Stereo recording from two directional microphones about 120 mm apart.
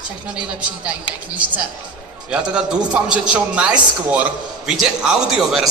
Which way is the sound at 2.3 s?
5° right (ahead or behind).